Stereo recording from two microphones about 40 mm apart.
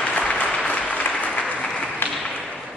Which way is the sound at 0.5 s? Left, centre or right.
Left.